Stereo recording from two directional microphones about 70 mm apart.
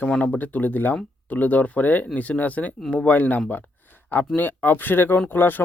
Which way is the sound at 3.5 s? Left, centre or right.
Left.